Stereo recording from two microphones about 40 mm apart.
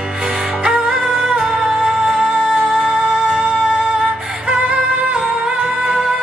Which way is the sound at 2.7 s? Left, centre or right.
Right.